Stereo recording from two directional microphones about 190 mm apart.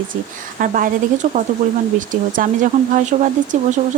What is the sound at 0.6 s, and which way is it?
Speech, 45° right (ahead or behind).